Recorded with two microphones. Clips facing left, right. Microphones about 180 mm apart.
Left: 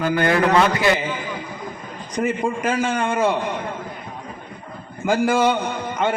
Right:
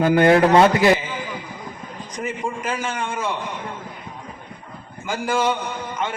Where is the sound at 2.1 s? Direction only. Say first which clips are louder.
Left 6 dB; 65° left (ahead or behind).